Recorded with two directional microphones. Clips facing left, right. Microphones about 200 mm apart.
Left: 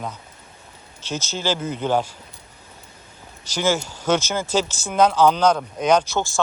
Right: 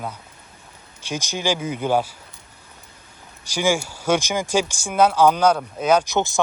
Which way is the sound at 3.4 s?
10° right (ahead or behind).